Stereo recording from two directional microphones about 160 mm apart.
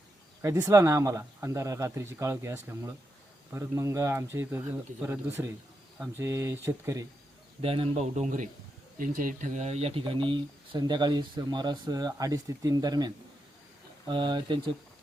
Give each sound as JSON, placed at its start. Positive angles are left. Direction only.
{"t": 0.4, "sound": "speech", "side_deg": -20}
{"t": 7.6, "sound": "speech", "side_deg": -35}